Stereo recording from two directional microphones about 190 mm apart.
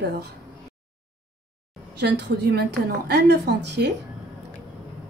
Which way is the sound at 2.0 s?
60° right (ahead or behind).